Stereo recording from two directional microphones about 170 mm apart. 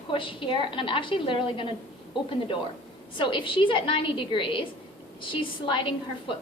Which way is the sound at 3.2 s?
30° left (ahead or behind).